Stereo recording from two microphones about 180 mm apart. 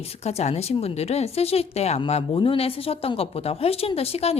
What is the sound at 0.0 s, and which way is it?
A woman's voice, 35° left (ahead or behind).